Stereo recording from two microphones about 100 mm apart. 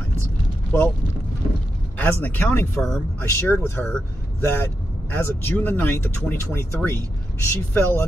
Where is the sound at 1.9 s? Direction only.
20° left (ahead or behind).